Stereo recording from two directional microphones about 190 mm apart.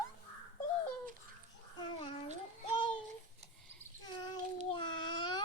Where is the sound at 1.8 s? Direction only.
25° left (ahead or behind).